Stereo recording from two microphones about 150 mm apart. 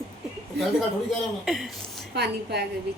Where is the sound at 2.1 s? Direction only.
90° right.